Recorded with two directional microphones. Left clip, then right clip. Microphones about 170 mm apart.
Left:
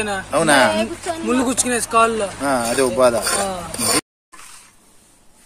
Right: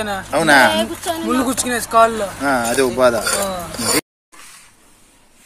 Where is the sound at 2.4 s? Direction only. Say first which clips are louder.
Right 3 dB; centre (ahead or behind).